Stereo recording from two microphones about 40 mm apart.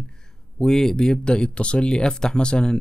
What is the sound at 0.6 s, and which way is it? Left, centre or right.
Speech, centre.